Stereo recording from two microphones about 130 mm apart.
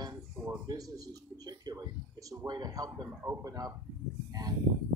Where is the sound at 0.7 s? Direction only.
25° right (ahead or behind).